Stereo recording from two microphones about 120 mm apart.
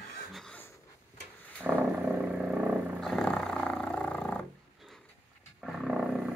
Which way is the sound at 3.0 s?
5° left (ahead or behind).